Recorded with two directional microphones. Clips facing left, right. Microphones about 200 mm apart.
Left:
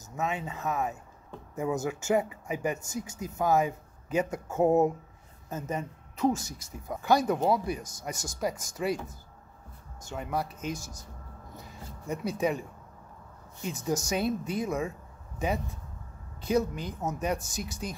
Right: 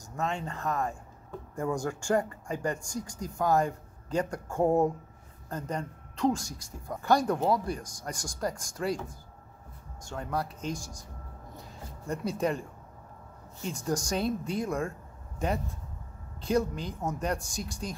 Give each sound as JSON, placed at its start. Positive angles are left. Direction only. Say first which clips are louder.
{"t": 0.0, "sound": "speech", "louder": "even", "side_deg": 5}
{"t": 10.0, "sound": "speech", "louder": "left 1 dB", "side_deg": 5}
{"t": 12.1, "sound": "speech", "louder": "left 1 dB", "side_deg": 5}
{"t": 13.7, "sound": "speech", "louder": "left 1 dB", "side_deg": 5}